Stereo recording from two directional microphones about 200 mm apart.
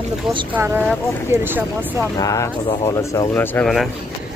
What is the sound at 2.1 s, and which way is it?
Speech, 15° left (ahead or behind).